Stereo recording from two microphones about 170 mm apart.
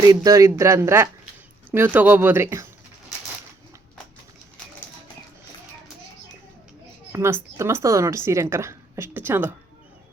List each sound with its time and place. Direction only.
0.0 s speech: 20° right (ahead or behind)
7.1 s speech: 15° right (ahead or behind)